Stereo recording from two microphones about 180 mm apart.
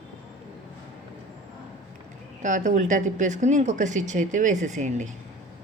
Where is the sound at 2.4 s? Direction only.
45° right (ahead or behind).